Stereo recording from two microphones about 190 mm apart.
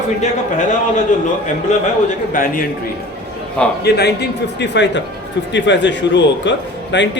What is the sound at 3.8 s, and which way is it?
A man's voice, 60° left (ahead or behind).